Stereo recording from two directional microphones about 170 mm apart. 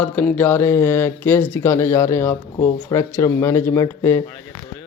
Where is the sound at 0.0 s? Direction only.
10° left (ahead or behind).